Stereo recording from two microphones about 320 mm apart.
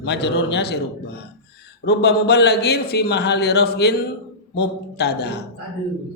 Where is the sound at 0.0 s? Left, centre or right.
Left.